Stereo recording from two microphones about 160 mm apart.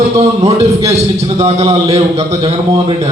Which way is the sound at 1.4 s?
40° right (ahead or behind).